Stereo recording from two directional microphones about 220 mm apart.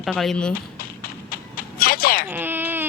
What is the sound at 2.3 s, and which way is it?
Baby cry, 10° right (ahead or behind).